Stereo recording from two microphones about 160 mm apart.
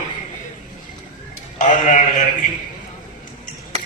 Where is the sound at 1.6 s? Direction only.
55° left (ahead or behind).